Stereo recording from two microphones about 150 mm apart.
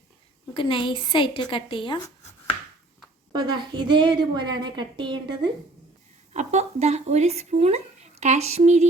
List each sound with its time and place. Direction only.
0.5 s a woman's voice: 35° left (ahead or behind)
3.3 s a woman's voice: 30° right (ahead or behind)
6.3 s speech: 50° right (ahead or behind)